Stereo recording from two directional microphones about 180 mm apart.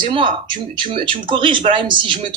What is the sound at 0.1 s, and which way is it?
Speech, 25° right (ahead or behind).